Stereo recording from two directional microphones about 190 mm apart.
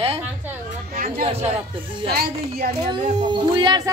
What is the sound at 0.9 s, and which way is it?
Speech, 45° right (ahead or behind).